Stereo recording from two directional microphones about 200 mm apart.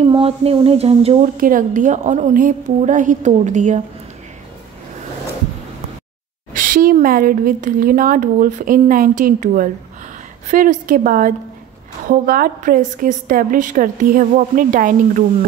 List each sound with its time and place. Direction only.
0.0 s speech: 30° right (ahead or behind)
1.4 s a woman's voice: 40° right (ahead or behind)
6.5 s a woman's voice: 45° right (ahead or behind)